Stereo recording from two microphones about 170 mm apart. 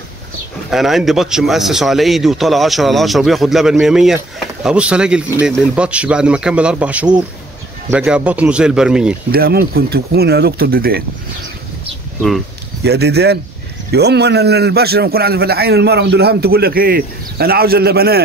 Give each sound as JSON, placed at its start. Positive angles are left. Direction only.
{"t": 0.7, "sound": "speech", "side_deg": 0}
{"t": 9.3, "sound": "speech", "side_deg": -65}
{"t": 12.8, "sound": "a man's voice", "side_deg": -75}